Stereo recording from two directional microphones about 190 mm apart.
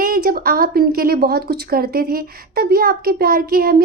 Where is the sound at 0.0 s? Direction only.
50° right (ahead or behind).